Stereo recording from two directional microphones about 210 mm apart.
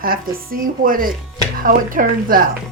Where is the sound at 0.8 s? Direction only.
40° right (ahead or behind).